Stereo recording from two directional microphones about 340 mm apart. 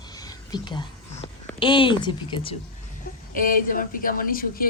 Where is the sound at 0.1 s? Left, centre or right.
Centre.